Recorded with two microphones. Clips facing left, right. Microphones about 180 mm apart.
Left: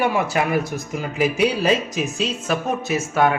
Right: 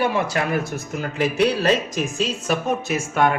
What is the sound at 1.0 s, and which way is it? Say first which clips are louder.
A man's voice: even; 10° left (ahead or behind).